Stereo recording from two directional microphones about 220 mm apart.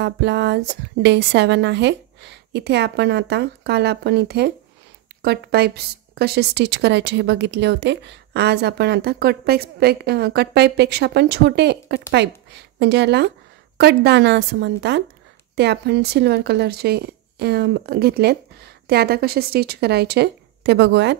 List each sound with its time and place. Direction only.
0.0 s speech: 55° right (ahead or behind)